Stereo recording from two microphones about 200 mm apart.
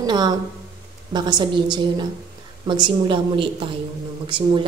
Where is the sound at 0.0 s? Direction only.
20° right (ahead or behind).